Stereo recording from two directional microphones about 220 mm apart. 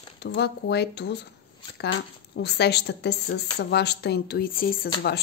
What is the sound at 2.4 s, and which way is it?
A woman's voice, 50° left (ahead or behind).